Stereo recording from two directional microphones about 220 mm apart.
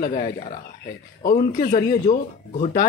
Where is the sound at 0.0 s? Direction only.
45° left (ahead or behind).